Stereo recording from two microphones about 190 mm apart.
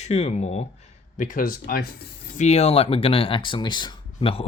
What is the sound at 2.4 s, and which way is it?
Speech, 35° left (ahead or behind).